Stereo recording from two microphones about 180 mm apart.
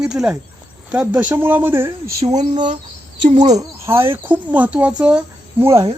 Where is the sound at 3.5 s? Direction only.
15° right (ahead or behind).